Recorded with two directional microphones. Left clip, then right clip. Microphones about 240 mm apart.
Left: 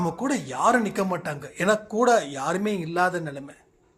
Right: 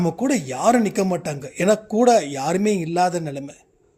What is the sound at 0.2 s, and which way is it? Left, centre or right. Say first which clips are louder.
Speech: right 3 dB; right.